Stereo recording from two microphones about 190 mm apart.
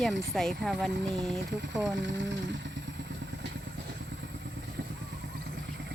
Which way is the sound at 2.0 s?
70° right (ahead or behind).